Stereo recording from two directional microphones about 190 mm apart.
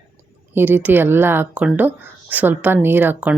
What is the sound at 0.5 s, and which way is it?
Speech, 10° right (ahead or behind).